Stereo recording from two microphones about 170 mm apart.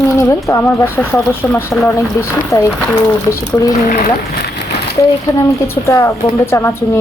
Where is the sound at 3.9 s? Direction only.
55° left (ahead or behind).